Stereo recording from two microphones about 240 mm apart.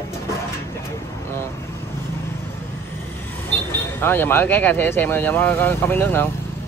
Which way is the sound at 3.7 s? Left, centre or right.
Centre.